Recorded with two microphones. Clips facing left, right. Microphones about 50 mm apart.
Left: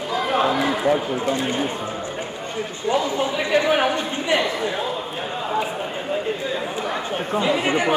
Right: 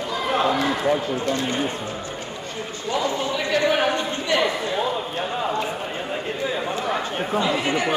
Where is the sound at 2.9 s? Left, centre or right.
Centre.